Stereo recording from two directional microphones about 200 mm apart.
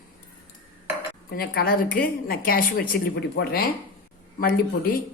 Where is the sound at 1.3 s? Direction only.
50° left (ahead or behind).